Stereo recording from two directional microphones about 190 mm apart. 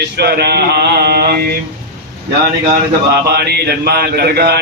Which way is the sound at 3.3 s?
60° right (ahead or behind).